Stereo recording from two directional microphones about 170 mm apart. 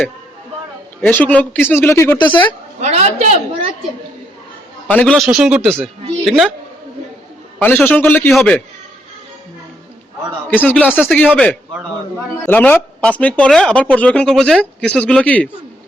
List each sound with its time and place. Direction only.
1.0 s speech: 10° left (ahead or behind)
2.8 s a woman's voice: 40° right (ahead or behind)
4.9 s speech: 10° left (ahead or behind)
7.6 s speech: 10° left (ahead or behind)
10.5 s speech: 10° left (ahead or behind)
10.8 s speech: 5° right (ahead or behind)
12.5 s speech: 10° left (ahead or behind)